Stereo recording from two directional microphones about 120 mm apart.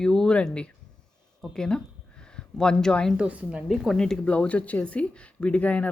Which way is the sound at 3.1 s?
10° right (ahead or behind).